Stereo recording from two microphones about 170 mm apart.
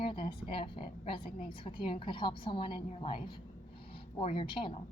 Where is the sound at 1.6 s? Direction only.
30° left (ahead or behind).